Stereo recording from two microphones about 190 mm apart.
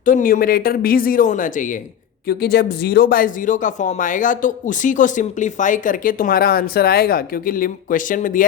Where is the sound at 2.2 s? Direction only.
55° left (ahead or behind).